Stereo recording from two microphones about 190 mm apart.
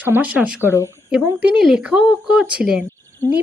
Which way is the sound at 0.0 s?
10° right (ahead or behind).